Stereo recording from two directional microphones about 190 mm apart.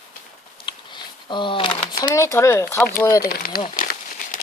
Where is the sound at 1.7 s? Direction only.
15° left (ahead or behind).